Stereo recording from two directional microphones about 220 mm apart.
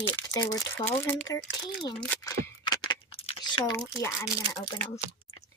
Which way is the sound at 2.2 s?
20° left (ahead or behind).